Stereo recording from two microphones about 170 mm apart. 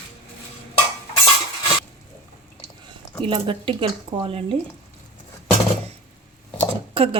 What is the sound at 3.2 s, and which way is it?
A woman's voice, 30° right (ahead or behind).